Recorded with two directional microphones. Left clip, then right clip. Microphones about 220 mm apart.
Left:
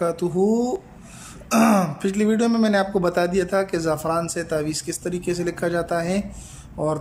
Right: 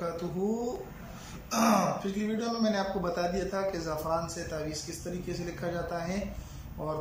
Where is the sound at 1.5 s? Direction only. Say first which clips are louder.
Left 7 dB; 45° left (ahead or behind).